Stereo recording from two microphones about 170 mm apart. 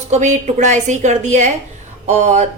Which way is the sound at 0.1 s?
45° right (ahead or behind).